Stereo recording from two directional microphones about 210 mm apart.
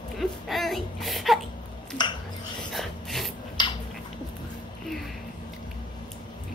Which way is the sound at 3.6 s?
20° left (ahead or behind).